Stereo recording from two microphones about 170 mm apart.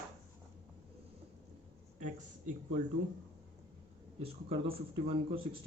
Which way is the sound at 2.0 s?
45° right (ahead or behind).